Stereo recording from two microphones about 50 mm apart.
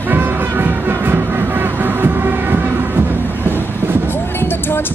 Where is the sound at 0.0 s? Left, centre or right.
Right.